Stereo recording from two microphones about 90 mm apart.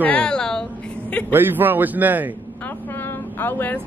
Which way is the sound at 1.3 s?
20° right (ahead or behind).